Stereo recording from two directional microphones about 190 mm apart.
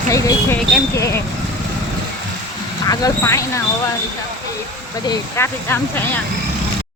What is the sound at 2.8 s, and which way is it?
Speech, 15° left (ahead or behind).